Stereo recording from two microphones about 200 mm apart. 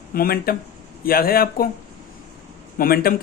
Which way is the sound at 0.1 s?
45° left (ahead or behind).